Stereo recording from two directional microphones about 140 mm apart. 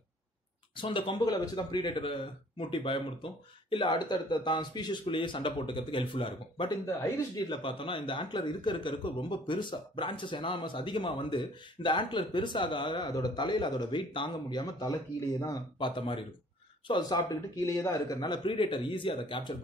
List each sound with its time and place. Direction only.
0.7 s speech: 35° left (ahead or behind)
7.0 s speech: 20° left (ahead or behind)
15.8 s speech: 35° left (ahead or behind)
17.6 s speech: 20° left (ahead or behind)